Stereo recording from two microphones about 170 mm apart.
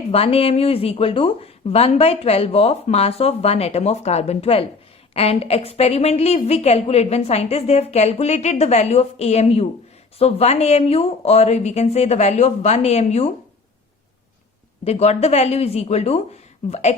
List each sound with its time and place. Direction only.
0.1 s a woman's voice: 35° left (ahead or behind)
14.8 s a woman's voice: 40° left (ahead or behind)